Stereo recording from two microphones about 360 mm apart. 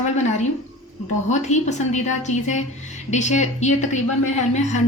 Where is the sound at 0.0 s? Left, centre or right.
Centre.